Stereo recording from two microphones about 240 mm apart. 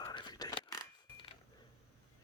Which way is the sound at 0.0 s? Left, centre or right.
Centre.